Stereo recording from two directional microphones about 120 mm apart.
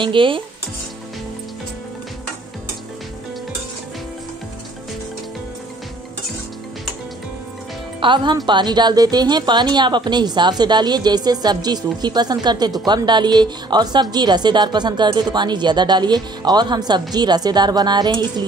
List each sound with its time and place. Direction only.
0.0 s speech: 45° right (ahead or behind)
8.0 s a woman's voice: 40° right (ahead or behind)